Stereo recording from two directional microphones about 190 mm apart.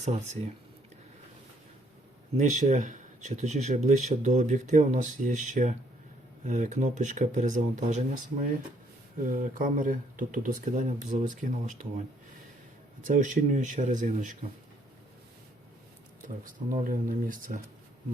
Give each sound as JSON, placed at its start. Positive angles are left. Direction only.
{"t": 2.4, "sound": "speech", "side_deg": -40}
{"t": 13.1, "sound": "speech", "side_deg": -40}
{"t": 16.2, "sound": "speech", "side_deg": -45}